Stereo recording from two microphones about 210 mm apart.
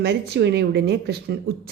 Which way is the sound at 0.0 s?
55° right (ahead or behind).